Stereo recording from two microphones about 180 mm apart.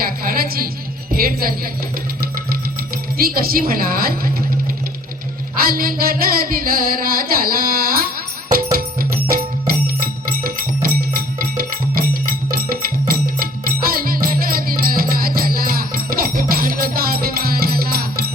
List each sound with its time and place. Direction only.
0.0 s a sound: 55° right (ahead or behind)
1.1 s a woman's voice: 55° right (ahead or behind)
2.2 s music: 55° right (ahead or behind)
5.5 s carnatic music: 55° right (ahead or behind)
8.5 s music: 55° right (ahead or behind)